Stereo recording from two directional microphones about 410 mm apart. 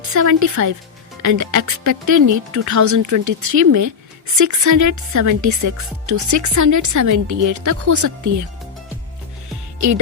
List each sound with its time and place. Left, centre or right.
0.1 s a woman's voice: right